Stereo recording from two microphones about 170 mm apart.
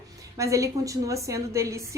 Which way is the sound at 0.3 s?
20° right (ahead or behind).